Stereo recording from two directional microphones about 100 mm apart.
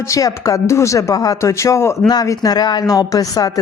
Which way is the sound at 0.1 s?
35° left (ahead or behind).